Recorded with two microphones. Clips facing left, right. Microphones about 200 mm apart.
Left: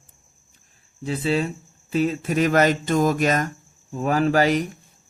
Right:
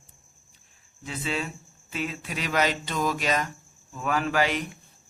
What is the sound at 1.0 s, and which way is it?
Speech, 35° left (ahead or behind).